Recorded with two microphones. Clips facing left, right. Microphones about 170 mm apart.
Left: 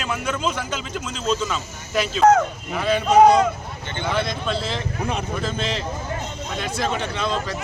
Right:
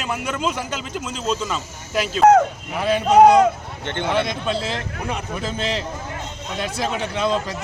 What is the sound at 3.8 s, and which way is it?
Speech, 75° right (ahead or behind).